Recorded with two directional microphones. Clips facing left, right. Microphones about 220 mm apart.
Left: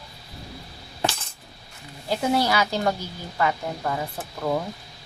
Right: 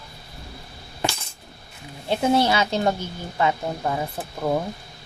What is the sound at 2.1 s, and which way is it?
Speech, 25° right (ahead or behind).